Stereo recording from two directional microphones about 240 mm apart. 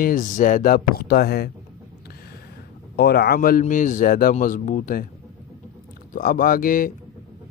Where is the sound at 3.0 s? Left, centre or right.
Left.